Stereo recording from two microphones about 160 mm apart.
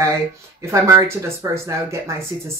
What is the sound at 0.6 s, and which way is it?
Speech, 20° right (ahead or behind).